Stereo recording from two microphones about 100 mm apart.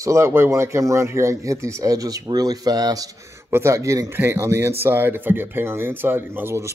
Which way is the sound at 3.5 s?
25° right (ahead or behind).